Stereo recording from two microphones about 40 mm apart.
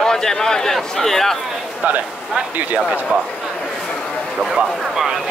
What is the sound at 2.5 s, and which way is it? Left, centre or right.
Speech, right.